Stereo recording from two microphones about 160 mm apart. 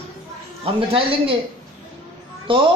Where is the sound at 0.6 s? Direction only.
35° right (ahead or behind).